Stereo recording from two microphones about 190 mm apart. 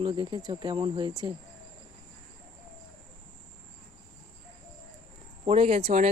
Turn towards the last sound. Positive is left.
turn(degrees=-35)  # may be behind; listen again after turning